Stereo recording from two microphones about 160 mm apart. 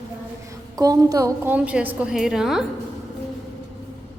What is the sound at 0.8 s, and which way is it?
A woman's voice, 20° right (ahead or behind).